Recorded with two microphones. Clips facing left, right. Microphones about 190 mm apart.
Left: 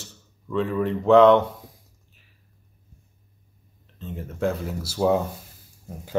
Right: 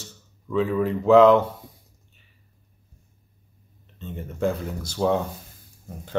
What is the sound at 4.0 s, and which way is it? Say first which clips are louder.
Speech: right 1 dB; centre (ahead or behind).